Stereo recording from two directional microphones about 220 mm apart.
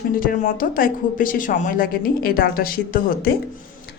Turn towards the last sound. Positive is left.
turn(degrees=40)  # may be behind; listen again after turning